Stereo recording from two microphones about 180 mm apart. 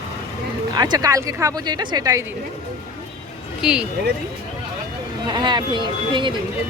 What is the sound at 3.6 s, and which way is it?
Speech, 5° right (ahead or behind).